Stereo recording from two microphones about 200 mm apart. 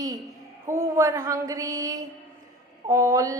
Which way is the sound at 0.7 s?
15° right (ahead or behind).